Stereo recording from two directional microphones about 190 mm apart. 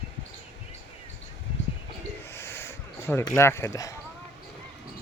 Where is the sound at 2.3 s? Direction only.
15° left (ahead or behind).